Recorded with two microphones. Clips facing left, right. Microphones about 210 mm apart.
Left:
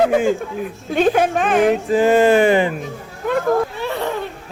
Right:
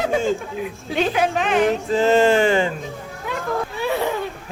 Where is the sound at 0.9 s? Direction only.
50° left (ahead or behind).